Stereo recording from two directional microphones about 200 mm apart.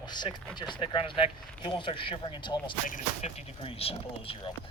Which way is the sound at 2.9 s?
40° left (ahead or behind).